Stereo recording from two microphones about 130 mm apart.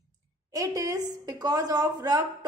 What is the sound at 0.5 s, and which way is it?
Speech, 25° right (ahead or behind).